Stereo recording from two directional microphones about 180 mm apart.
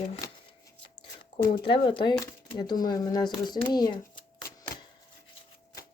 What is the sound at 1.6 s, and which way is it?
Speech, 30° left (ahead or behind).